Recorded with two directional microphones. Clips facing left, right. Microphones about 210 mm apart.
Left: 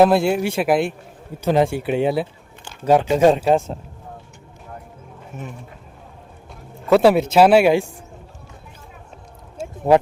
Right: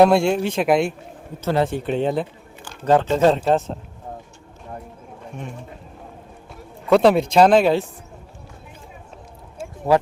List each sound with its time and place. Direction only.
0.0 s speech: centre (ahead or behind)
1.4 s speech: 15° left (ahead or behind)
6.9 s speech: 5° left (ahead or behind)
9.9 s speech: 20° left (ahead or behind)